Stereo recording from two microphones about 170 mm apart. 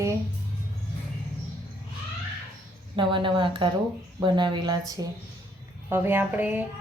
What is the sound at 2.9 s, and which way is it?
Speech, 30° right (ahead or behind).